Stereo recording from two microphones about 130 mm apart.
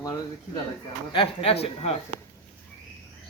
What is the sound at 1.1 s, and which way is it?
Speech, 45° left (ahead or behind).